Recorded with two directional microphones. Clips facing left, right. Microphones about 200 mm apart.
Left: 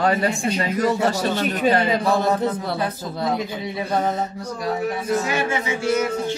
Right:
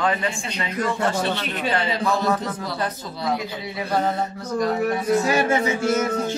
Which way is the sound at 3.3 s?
20° left (ahead or behind).